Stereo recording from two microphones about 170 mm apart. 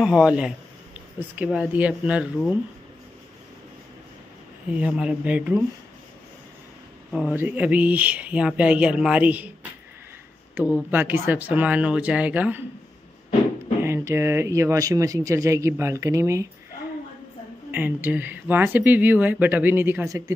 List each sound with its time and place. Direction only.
0.0 s speech: 5° right (ahead or behind)
4.6 s speech: 5° right (ahead or behind)
7.1 s speech: 5° right (ahead or behind)
10.5 s speech: 10° right (ahead or behind)
13.8 s speech: 15° right (ahead or behind)
17.6 s speech: 10° right (ahead or behind)